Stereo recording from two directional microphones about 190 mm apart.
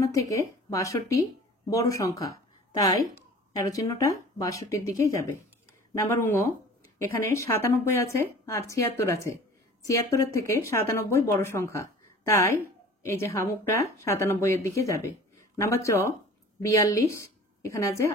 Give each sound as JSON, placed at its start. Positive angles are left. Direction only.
{"t": 0.0, "sound": "speech", "side_deg": 15}
{"t": 3.6, "sound": "a woman's voice", "side_deg": 15}